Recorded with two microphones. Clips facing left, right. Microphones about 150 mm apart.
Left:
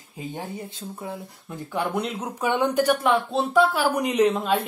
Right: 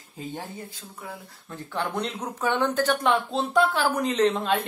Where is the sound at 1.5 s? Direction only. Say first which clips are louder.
Left 3 dB; 10° left (ahead or behind).